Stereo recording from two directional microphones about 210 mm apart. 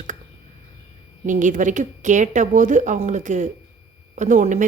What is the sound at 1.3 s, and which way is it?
A woman's voice, 35° right (ahead or behind).